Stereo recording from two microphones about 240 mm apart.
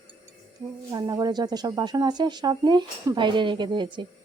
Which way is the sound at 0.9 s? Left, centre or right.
Centre.